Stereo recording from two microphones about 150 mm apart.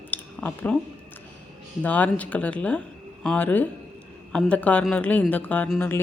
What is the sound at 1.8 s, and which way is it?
Speech, 10° left (ahead or behind).